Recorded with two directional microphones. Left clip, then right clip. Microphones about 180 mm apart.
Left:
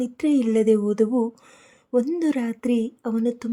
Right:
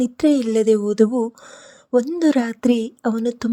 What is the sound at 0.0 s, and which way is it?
Speech, 30° right (ahead or behind).